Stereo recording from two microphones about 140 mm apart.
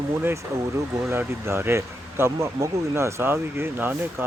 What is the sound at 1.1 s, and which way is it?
Speech, 20° right (ahead or behind).